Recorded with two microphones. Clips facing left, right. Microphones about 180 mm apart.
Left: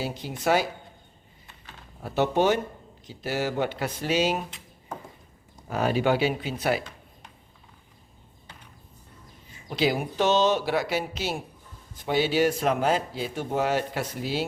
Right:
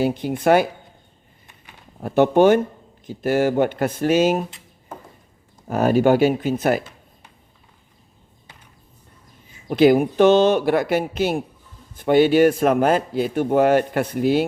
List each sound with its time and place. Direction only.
0.0 s speech: 55° right (ahead or behind)
2.0 s speech: 50° right (ahead or behind)
5.6 s speech: 45° right (ahead or behind)
9.6 s speech: 55° right (ahead or behind)